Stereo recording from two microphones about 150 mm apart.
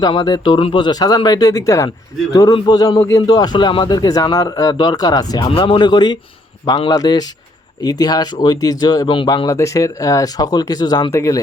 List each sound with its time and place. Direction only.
0.0 s speech: 30° left (ahead or behind)